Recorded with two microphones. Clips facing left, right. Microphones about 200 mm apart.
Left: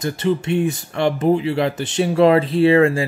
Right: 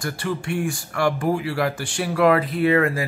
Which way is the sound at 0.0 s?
20° left (ahead or behind).